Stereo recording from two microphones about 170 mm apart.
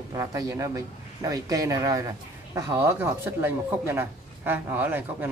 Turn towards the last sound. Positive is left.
turn(degrees=-10)  # may be behind; listen again after turning